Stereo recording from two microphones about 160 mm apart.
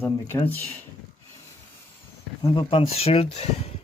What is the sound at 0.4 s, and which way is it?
Speech, 10° left (ahead or behind).